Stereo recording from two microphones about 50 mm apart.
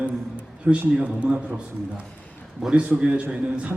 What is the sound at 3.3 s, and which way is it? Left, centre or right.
Speech, right.